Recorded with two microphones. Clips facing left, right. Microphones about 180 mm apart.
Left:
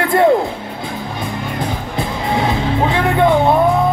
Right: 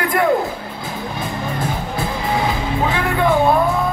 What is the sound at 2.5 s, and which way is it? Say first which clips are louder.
Music: left 3 dB; 25° left (ahead or behind).